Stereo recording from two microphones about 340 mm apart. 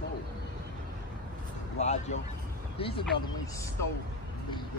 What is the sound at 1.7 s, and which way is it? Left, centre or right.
Speech, centre.